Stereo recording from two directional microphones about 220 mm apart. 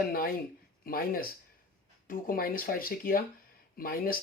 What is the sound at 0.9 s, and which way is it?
Speech, 40° left (ahead or behind).